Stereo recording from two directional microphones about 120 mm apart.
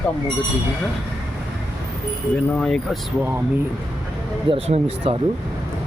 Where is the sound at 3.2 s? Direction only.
15° right (ahead or behind).